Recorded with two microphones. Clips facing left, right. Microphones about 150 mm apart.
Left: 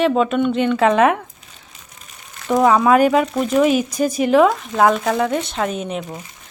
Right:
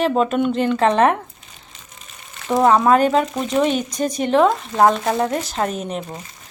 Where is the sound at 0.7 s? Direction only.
35° right (ahead or behind).